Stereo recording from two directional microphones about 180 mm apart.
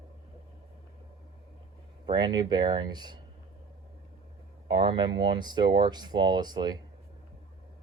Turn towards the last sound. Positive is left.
turn(degrees=-25)  # may be behind; listen again after turning